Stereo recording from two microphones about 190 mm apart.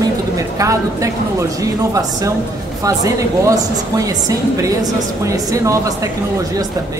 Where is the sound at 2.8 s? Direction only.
15° right (ahead or behind).